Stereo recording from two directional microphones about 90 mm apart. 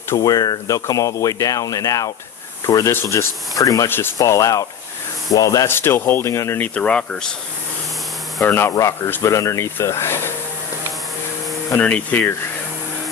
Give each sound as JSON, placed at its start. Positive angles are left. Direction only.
{"t": 0.2, "sound": "speech", "side_deg": 45}
{"t": 3.8, "sound": "speech", "side_deg": 25}
{"t": 4.2, "sound": "speech", "side_deg": 35}
{"t": 5.7, "sound": "speech", "side_deg": 25}
{"t": 6.6, "sound": "speech", "side_deg": 15}
{"t": 8.4, "sound": "speech", "side_deg": 25}
{"t": 8.7, "sound": "speech", "side_deg": 35}
{"t": 11.8, "sound": "speech", "side_deg": 15}